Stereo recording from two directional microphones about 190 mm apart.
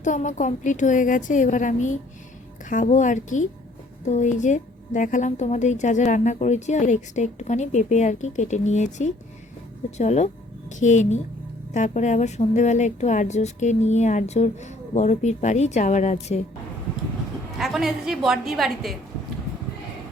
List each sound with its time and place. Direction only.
0.0 s a woman's voice: 40° left (ahead or behind)
17.6 s a woman's voice: centre (ahead or behind)